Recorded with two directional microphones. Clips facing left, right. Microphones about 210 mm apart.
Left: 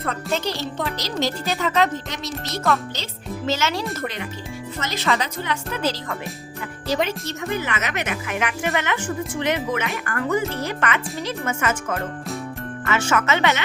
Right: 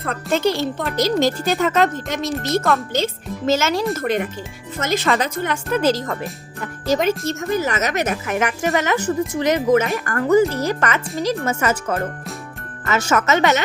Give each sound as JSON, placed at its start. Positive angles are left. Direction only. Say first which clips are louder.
{"t": 0.3, "sound": "speech", "louder": "right 10 dB", "side_deg": -50}